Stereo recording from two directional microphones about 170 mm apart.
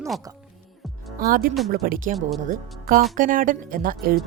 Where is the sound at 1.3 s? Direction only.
55° right (ahead or behind).